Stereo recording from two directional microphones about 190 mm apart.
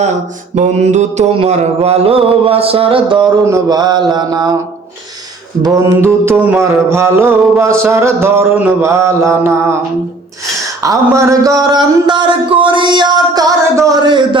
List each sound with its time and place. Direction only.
0.5 s mantra: 40° right (ahead or behind)
3.4 s speech: 20° right (ahead or behind)
5.6 s mantra: 20° right (ahead or behind)
10.8 s speech: 15° right (ahead or behind)